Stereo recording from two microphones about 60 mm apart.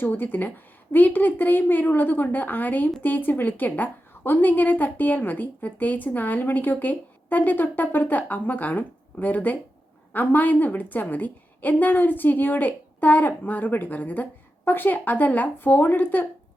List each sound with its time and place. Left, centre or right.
0.0 s a woman's voice: left